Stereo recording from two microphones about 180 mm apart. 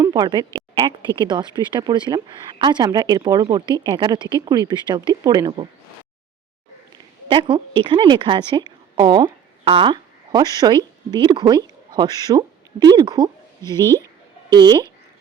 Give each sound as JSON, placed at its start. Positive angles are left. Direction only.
{"t": 0.0, "sound": "speech", "side_deg": -20}
{"t": 7.3, "sound": "a woman's voice", "side_deg": -25}